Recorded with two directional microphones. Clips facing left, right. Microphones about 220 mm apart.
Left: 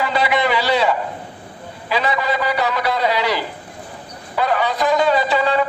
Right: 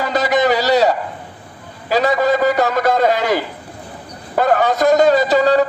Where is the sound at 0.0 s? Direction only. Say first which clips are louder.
Right 3 dB; 45° right (ahead or behind).